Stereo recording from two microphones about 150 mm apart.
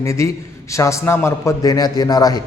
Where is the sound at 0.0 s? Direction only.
20° left (ahead or behind).